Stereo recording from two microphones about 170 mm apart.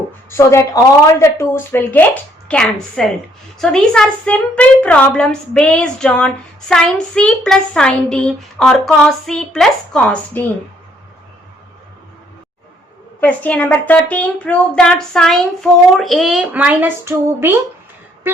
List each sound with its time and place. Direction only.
0.3 s a woman's voice: 15° left (ahead or behind)
13.1 s a woman's voice: 10° left (ahead or behind); by 17.6 s 10° right (ahead or behind)